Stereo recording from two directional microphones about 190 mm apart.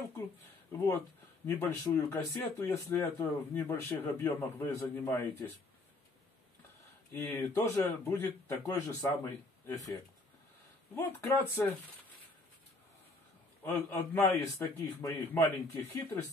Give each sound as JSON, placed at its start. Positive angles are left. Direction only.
{"t": 0.7, "sound": "speech", "side_deg": 15}
{"t": 7.1, "sound": "speech", "side_deg": 10}
{"t": 11.0, "sound": "speech", "side_deg": 10}
{"t": 13.7, "sound": "speech", "side_deg": 10}